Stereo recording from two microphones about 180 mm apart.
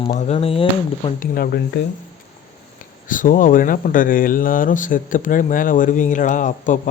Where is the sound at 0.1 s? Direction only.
40° left (ahead or behind).